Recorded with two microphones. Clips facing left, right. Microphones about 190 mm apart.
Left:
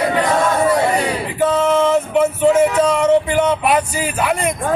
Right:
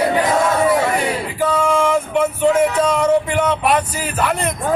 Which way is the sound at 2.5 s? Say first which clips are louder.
Left 2 dB; 5° left (ahead or behind).